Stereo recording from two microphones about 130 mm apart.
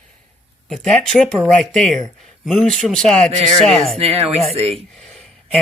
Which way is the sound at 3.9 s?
50° right (ahead or behind).